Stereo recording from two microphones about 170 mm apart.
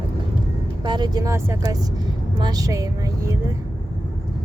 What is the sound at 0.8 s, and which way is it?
Speech, 25° right (ahead or behind).